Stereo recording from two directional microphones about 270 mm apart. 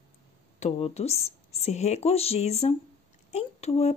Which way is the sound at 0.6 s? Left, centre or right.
Left.